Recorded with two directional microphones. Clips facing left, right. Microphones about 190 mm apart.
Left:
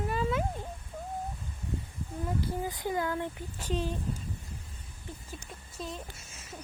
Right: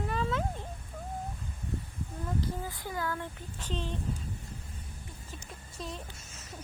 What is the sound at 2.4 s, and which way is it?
Speech, 20° left (ahead or behind).